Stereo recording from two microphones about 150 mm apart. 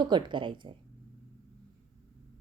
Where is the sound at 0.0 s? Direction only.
30° right (ahead or behind).